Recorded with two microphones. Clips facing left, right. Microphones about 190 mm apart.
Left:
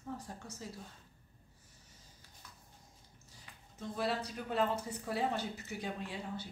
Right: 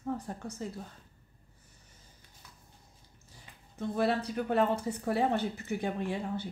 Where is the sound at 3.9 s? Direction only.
60° right (ahead or behind).